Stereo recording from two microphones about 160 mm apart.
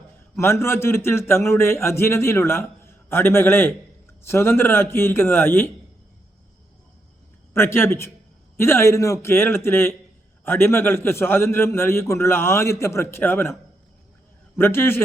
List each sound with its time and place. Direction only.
0.3 s a man's voice: 15° left (ahead or behind)
7.5 s a man's voice: 15° left (ahead or behind)